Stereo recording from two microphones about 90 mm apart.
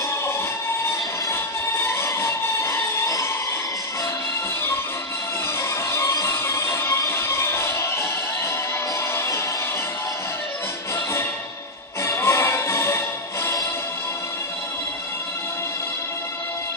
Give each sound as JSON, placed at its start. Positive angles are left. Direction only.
{"t": 0.8, "sound": "music", "side_deg": 30}
{"t": 5.6, "sound": "music", "side_deg": 30}
{"t": 9.1, "sound": "music", "side_deg": 30}
{"t": 12.0, "sound": "music", "side_deg": 30}